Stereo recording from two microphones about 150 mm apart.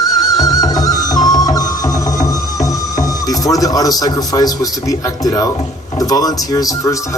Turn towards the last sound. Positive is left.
turn(degrees=25)  # may be behind; listen again after turning